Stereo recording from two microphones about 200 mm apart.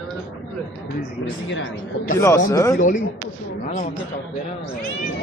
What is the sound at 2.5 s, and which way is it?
Speech, 15° left (ahead or behind).